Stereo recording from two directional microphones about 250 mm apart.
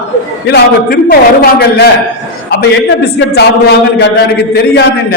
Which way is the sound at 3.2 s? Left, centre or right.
Left.